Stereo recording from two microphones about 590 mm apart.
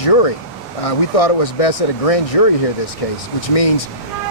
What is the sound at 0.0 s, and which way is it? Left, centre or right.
Speech, left.